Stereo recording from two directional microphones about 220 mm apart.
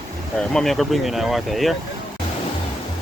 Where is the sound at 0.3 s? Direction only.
Centre (ahead or behind).